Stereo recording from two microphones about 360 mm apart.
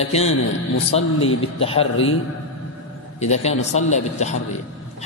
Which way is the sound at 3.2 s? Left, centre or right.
Centre.